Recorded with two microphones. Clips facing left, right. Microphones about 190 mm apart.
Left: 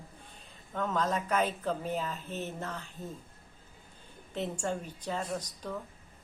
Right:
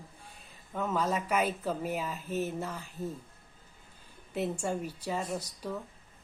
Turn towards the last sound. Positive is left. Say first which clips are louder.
# right 1 dB
turn(degrees=-10)  # may be behind; listen again after turning